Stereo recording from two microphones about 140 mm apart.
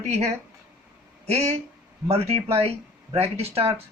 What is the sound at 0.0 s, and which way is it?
Speech, 50° right (ahead or behind).